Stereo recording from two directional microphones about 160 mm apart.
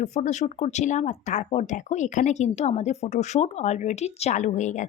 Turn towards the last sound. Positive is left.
turn(degrees=50)  # may be behind; listen again after turning